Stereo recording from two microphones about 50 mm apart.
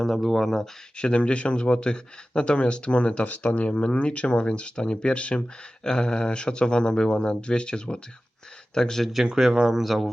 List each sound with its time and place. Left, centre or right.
0.0 s speech: centre
0.9 s speech: left
9.2 s speech: centre